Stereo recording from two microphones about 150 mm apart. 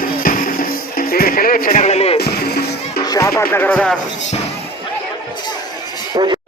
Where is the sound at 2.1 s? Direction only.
90° left.